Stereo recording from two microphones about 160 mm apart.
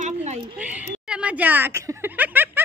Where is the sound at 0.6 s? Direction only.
10° right (ahead or behind).